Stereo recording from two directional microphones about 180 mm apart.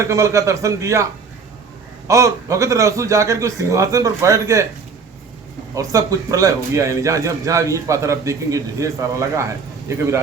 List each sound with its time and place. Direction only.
0.0 s a man's voice: 15° right (ahead or behind)
2.0 s a man's voice: 20° right (ahead or behind)
5.7 s a man's voice: 20° right (ahead or behind)